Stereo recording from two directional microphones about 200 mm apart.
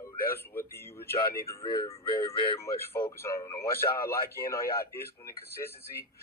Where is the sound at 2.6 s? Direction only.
15° left (ahead or behind).